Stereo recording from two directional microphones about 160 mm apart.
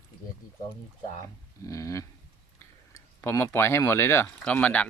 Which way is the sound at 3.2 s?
15° left (ahead or behind).